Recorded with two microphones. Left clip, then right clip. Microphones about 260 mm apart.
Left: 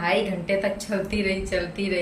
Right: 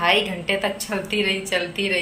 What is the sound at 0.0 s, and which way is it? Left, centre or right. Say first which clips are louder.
A woman's voice: right 4 dB; centre.